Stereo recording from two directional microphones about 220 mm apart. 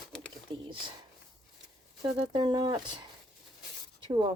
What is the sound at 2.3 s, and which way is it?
Speech, 20° right (ahead or behind).